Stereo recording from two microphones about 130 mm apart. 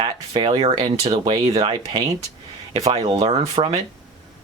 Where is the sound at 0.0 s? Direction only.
40° right (ahead or behind).